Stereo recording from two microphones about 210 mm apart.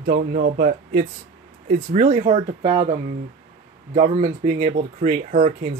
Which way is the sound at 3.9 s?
30° right (ahead or behind).